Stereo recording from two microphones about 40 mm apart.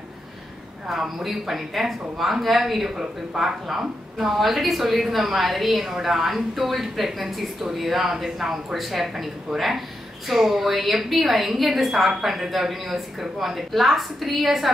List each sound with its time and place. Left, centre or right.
0.8 s a woman's voice: centre
3.0 s speech: centre
3.6 s a woman's voice: centre